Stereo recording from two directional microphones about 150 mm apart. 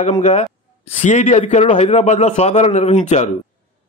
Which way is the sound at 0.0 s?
50° left (ahead or behind).